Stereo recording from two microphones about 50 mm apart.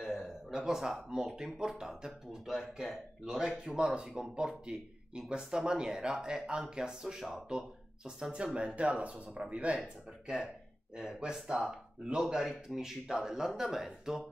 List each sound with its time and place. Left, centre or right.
0.0 s a sound: centre
0.5 s speech: centre
9.8 s speech: centre